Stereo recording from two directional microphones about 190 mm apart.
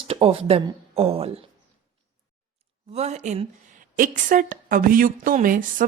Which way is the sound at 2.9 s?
35° right (ahead or behind).